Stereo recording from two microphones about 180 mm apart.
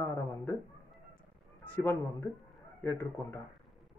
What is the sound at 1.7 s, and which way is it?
Speech, 15° left (ahead or behind).